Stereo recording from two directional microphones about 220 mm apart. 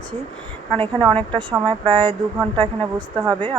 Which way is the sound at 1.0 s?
25° right (ahead or behind).